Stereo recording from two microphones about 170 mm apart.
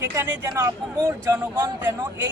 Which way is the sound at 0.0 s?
15° right (ahead or behind).